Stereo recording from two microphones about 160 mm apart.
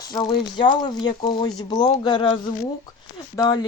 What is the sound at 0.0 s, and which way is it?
Speech, 25° left (ahead or behind).